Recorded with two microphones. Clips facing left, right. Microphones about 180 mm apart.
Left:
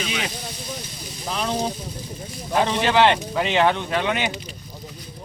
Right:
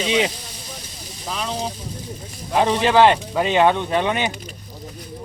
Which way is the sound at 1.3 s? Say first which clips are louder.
Left 1 dB; centre (ahead or behind).